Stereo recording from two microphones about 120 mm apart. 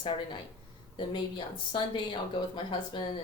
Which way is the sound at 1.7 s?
45° left (ahead or behind).